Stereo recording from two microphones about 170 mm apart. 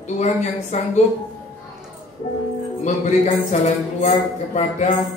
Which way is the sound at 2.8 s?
45° left (ahead or behind).